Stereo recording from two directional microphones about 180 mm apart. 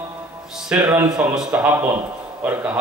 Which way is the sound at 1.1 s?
5° right (ahead or behind).